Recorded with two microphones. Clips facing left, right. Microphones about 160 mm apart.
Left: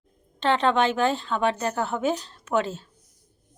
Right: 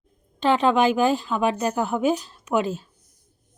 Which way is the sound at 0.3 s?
10° right (ahead or behind).